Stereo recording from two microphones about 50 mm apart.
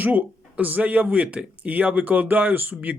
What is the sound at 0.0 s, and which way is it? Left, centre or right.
Speech, right.